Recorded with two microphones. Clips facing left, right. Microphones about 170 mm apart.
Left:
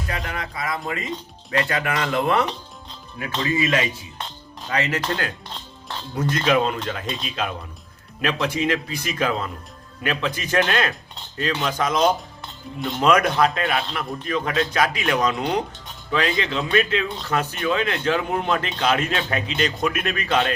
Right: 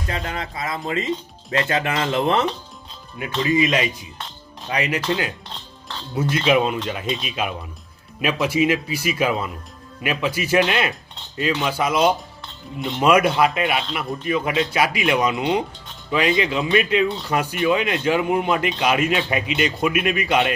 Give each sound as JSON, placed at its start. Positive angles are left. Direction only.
{"t": 0.1, "sound": "speech", "side_deg": -25}
{"t": 3.5, "sound": "speech", "side_deg": -20}